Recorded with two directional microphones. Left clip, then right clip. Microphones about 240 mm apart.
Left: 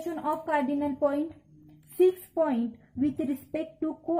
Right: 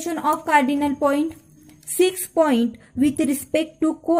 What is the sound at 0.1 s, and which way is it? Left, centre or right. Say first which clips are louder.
A woman's voice: right 10 dB; right.